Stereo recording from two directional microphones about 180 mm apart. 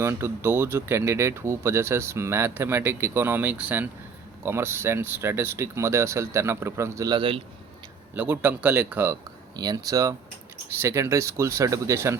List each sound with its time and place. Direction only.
0.0 s speech: 15° right (ahead or behind)
8.1 s speech: 10° right (ahead or behind)
9.6 s speech: 20° right (ahead or behind)